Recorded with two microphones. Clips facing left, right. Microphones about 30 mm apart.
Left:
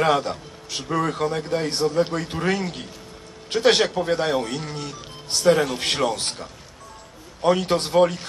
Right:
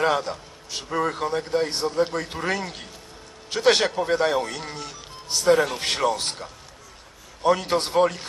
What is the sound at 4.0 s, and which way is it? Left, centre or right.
Speech, left.